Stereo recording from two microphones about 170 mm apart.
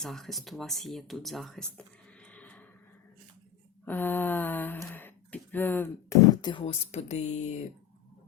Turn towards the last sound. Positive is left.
turn(degrees=40)  # may be behind; listen again after turning